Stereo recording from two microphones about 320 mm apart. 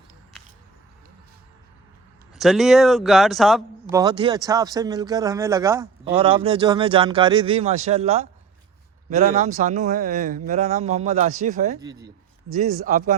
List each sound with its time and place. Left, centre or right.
2.3 s speech: centre
4.0 s a man's voice: centre
11.8 s a man's voice: centre
12.5 s speech: right